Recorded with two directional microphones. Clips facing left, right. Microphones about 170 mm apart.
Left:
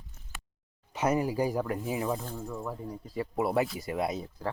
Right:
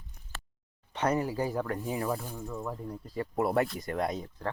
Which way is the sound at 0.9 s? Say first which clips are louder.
Left 2 dB; 10° left (ahead or behind).